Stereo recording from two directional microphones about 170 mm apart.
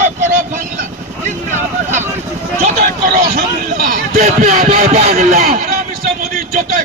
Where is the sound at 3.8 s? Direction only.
50° right (ahead or behind).